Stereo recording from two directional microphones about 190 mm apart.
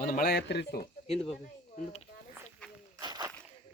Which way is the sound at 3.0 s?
20° right (ahead or behind).